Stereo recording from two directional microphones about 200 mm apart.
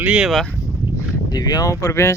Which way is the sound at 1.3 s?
20° left (ahead or behind).